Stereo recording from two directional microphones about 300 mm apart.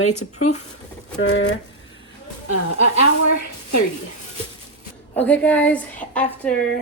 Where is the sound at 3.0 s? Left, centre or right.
Left.